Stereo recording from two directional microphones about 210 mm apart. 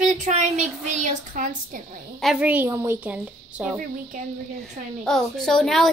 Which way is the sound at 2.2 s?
5° right (ahead or behind).